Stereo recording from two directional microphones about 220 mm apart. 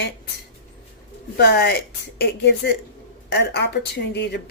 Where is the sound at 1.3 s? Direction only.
45° left (ahead or behind).